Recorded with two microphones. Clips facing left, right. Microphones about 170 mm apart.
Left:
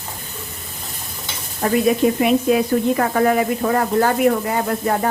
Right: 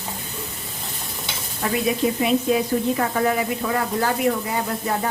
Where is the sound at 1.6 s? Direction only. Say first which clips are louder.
Left 6 dB; 40° left (ahead or behind).